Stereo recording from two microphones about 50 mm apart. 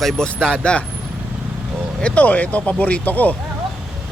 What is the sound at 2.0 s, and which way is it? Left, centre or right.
Speech, left.